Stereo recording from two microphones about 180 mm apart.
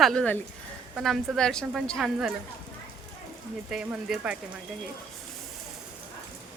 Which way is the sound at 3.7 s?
5° right (ahead or behind).